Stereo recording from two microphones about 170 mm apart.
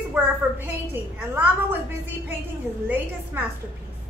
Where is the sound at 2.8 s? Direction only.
10° right (ahead or behind).